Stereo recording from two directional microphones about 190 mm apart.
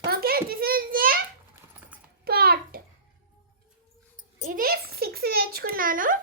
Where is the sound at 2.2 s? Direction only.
55° right (ahead or behind).